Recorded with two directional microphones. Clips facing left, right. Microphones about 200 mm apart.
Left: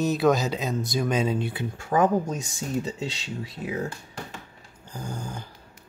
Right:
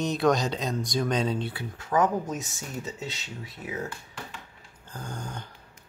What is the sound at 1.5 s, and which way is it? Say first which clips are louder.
Speech: left 1 dB; 30° left (ahead or behind).